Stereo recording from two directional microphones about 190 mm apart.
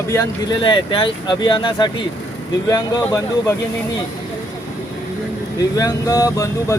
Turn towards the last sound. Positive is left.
turn(degrees=15)  # may be behind; listen again after turning